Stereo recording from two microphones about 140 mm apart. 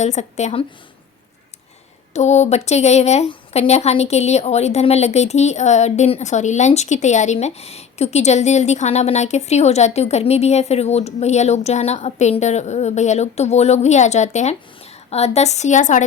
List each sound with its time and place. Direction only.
0.0 s a woman's voice: 55° left (ahead or behind)
2.1 s a woman's voice: 55° left (ahead or behind)